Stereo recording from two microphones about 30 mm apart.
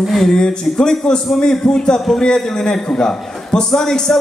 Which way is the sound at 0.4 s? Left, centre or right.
Left.